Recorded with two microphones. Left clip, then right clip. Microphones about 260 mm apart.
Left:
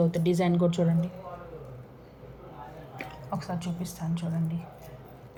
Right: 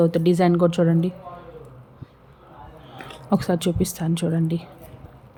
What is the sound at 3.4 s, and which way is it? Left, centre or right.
Speech, right.